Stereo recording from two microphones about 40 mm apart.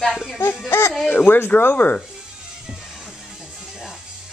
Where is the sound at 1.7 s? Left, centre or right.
Left.